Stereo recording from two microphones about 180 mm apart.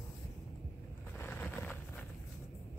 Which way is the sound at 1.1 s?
10° left (ahead or behind).